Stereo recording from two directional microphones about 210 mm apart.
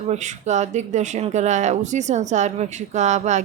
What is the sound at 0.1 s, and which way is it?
Speech, 35° right (ahead or behind).